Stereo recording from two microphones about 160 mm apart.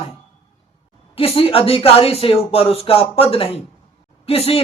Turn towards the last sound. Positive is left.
turn(degrees=40)  # may be behind; listen again after turning